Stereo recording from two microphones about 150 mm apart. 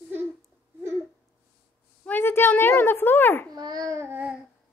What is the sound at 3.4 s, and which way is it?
Babbling, 25° right (ahead or behind).